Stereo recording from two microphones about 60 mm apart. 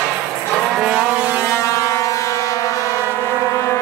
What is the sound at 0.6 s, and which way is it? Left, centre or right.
Vehicle, centre.